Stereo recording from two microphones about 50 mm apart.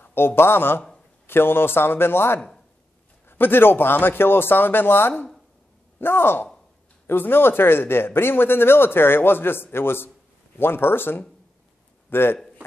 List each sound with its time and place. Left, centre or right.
0.0 s a man's voice: left